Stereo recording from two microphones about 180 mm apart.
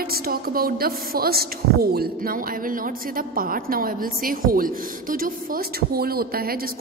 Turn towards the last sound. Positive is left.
turn(degrees=-55)  # may be behind; listen again after turning